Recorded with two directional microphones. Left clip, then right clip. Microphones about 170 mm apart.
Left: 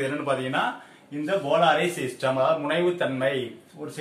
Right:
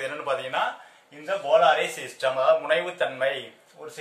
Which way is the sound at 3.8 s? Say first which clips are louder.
Left 3 dB; 15° right (ahead or behind).